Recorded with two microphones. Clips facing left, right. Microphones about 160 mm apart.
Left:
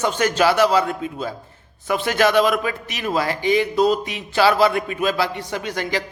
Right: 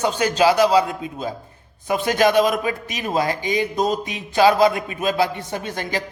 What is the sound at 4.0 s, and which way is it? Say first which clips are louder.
A man's voice: right 2 dB; 20° right (ahead or behind).